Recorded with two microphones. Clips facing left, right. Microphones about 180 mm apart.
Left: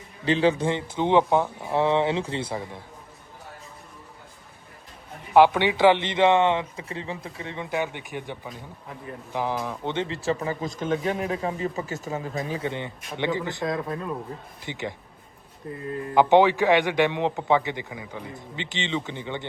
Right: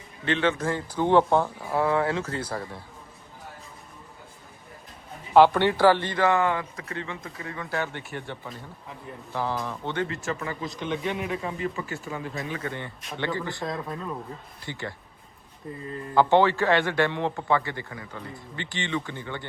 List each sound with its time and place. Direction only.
0.8 s speech: 20° left (ahead or behind)
5.3 s a man's voice: 15° left (ahead or behind)
10.2 s speech: 35° left (ahead or behind)
10.6 s speech: 45° left (ahead or behind)
12.1 s a man's voice: 30° left (ahead or behind)
13.7 s speech: centre (ahead or behind)
14.6 s a man's voice: 20° left (ahead or behind)
16.1 s a man's voice: 15° left (ahead or behind)